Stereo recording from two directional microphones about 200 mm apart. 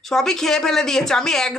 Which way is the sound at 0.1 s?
Centre (ahead or behind).